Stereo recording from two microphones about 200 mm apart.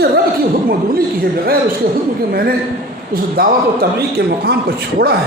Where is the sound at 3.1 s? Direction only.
50° right (ahead or behind).